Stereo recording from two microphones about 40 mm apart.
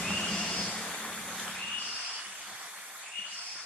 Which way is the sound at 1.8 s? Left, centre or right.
Right.